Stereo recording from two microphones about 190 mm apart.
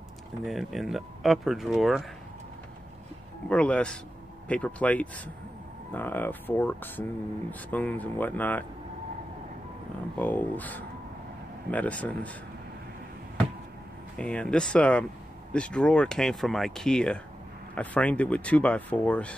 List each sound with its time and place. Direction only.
0.5 s speech: centre (ahead or behind)
3.4 s speech: 5° left (ahead or behind)
10.1 s speech: 10° left (ahead or behind)
14.1 s speech: 5° left (ahead or behind)